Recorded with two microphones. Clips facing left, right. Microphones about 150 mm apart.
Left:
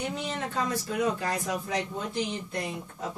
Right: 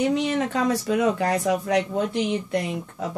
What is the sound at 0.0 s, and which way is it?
Speech, 80° right.